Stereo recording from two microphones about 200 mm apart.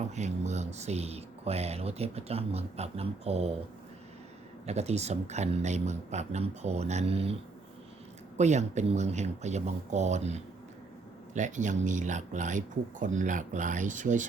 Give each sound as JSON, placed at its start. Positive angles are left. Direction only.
{"t": 0.1, "sound": "speech", "side_deg": -35}
{"t": 4.6, "sound": "speech", "side_deg": -35}
{"t": 8.4, "sound": "speech", "side_deg": -35}